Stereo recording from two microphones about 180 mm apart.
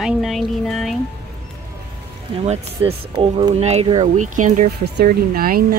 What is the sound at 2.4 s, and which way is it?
Speech, 35° right (ahead or behind).